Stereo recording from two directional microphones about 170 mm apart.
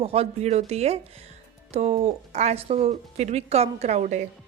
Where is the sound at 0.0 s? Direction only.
35° right (ahead or behind).